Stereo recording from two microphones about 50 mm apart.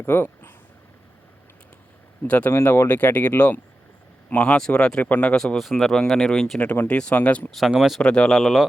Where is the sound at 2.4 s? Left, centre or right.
Left.